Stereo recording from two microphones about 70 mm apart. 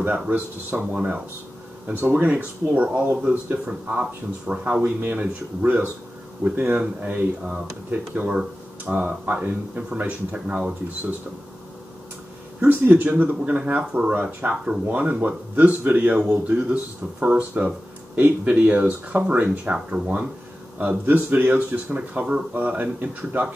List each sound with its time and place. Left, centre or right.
0.3 s speech: right
12.5 s speech: right; by 14.8 s centre
14.9 s speech: right